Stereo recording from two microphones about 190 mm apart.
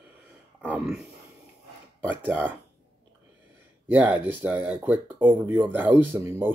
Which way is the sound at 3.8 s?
10° right (ahead or behind).